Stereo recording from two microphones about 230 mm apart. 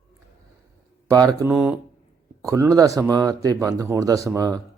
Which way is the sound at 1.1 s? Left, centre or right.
Centre.